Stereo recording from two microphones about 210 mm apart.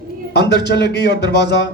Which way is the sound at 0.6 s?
50° left (ahead or behind).